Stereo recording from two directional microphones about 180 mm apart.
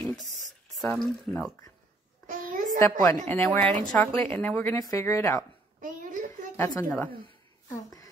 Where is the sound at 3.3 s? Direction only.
10° left (ahead or behind).